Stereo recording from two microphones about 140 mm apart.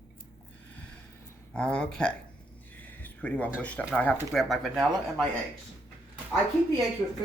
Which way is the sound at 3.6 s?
10° left (ahead or behind).